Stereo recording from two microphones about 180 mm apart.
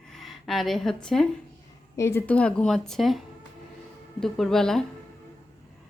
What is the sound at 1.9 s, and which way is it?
Speech, 15° left (ahead or behind).